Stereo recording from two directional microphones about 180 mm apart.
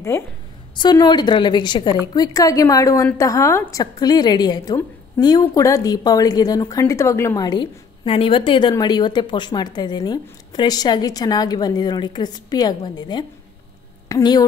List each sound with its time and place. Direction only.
0.1 s a woman's voice: 15° left (ahead or behind)